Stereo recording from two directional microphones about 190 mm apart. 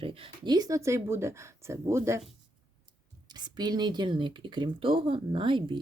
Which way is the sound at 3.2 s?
20° right (ahead or behind).